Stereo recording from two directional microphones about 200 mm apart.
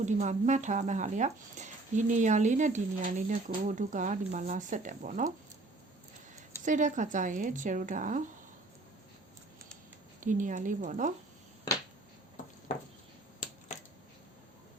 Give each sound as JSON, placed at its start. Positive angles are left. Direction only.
{"t": 0.0, "sound": "speech", "side_deg": -35}
{"t": 6.7, "sound": "speech", "side_deg": -40}
{"t": 10.2, "sound": "speech", "side_deg": -40}
{"t": 13.7, "sound": "a sound", "side_deg": 35}